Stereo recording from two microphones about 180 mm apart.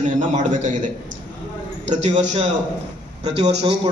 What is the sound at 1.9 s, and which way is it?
Speech, 40° right (ahead or behind).